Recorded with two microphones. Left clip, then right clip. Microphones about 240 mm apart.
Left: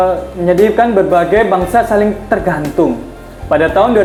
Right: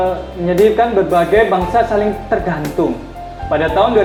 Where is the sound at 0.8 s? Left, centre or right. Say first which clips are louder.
Left 3 dB; left.